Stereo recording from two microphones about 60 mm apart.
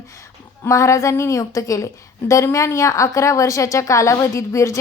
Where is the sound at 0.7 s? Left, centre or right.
Left.